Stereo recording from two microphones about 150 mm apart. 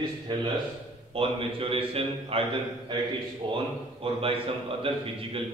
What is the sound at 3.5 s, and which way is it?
A man's voice, 40° right (ahead or behind).